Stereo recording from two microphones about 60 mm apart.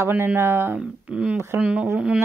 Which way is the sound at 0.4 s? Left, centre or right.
Right.